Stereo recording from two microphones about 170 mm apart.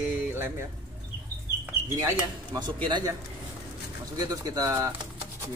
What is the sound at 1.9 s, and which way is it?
Speech, 20° right (ahead or behind).